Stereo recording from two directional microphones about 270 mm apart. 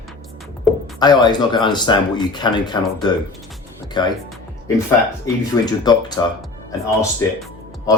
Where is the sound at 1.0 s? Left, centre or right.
Centre.